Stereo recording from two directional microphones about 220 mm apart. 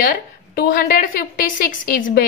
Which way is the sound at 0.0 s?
40° left (ahead or behind).